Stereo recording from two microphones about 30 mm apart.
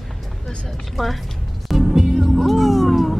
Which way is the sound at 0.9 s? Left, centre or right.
Centre.